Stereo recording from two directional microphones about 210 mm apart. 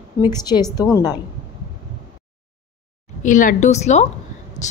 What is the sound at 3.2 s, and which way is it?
A woman's voice, 40° left (ahead or behind).